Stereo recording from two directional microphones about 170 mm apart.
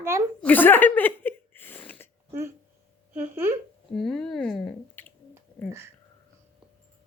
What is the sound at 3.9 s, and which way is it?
Squish, 5° left (ahead or behind).